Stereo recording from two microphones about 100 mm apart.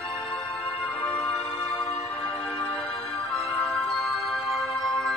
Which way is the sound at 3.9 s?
Centre (ahead or behind).